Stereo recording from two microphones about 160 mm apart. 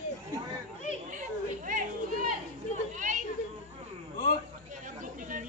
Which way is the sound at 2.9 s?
55° right (ahead or behind).